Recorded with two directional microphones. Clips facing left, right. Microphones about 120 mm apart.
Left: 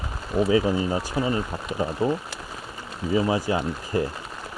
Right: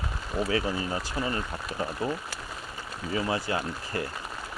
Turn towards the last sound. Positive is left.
turn(degrees=20)  # may be behind; listen again after turning